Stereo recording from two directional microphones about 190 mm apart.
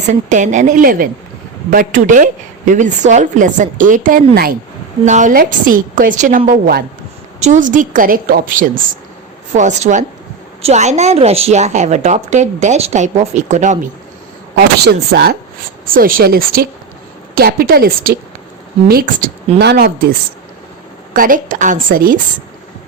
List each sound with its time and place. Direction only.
0.1 s a woman's voice: 40° right (ahead or behind)
7.3 s a woman's voice: 40° right (ahead or behind)
14.8 s a woman's voice: 55° right (ahead or behind)
19.5 s a woman's voice: 60° right (ahead or behind)